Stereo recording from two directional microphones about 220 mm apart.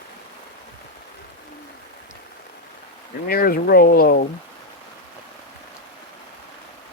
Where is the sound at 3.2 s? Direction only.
40° left (ahead or behind).